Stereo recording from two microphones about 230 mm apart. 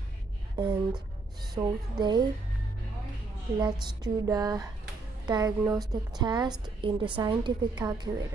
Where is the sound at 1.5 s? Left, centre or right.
Centre.